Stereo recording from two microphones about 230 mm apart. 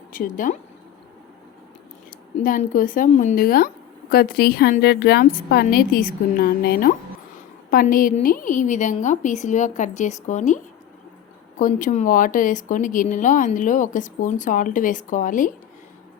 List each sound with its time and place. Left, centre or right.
0.1 s a woman's voice: left
2.4 s a woman's voice: left
11.6 s a woman's voice: left